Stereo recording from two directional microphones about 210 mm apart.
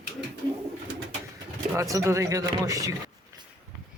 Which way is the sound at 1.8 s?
15° right (ahead or behind).